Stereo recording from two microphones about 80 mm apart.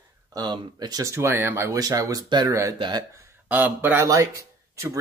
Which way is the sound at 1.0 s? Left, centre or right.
Right.